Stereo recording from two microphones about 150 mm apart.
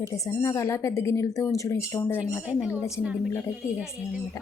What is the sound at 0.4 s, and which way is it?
Speech, 20° left (ahead or behind).